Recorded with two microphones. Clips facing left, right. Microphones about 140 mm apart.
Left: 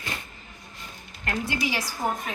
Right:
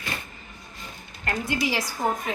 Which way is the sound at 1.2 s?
20° right (ahead or behind).